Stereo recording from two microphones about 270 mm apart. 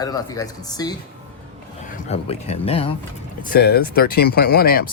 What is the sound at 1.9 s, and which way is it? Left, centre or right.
Speech, left.